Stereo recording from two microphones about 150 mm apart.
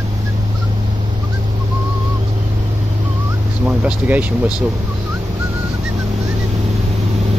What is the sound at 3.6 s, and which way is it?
Speech, 10° right (ahead or behind).